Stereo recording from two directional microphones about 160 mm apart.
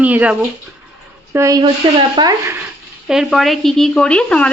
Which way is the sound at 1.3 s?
20° right (ahead or behind).